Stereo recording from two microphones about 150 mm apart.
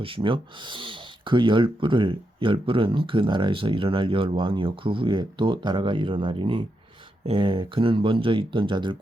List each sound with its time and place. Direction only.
0.0 s speech: 35° right (ahead or behind)